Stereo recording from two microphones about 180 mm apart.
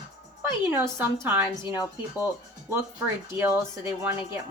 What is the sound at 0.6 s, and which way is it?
Speech, 10° right (ahead or behind).